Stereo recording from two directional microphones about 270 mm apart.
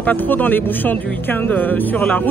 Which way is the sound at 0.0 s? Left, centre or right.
Centre.